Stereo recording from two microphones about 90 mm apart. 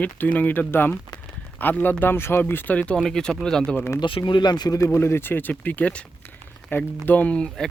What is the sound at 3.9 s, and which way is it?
Speech, 65° left (ahead or behind).